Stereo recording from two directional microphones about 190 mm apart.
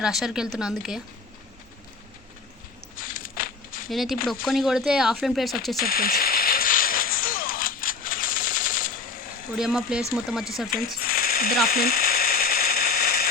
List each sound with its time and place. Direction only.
0.0 s speech: centre (ahead or behind)
3.0 s a sound: 45° left (ahead or behind)
3.8 s speech: centre (ahead or behind)
5.7 s music: 50° left (ahead or behind)
9.6 s speech: 5° right (ahead or behind)
10.9 s a sound: 50° left (ahead or behind)
11.7 s mechanisms: 50° left (ahead or behind)